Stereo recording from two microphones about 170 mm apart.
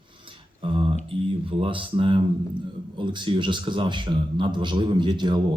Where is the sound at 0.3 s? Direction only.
30° right (ahead or behind).